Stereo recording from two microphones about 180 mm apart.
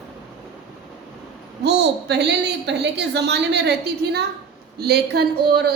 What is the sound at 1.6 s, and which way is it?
A woman's voice, 70° right (ahead or behind).